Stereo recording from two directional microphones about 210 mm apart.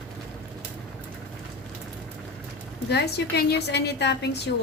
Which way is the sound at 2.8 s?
50° left (ahead or behind).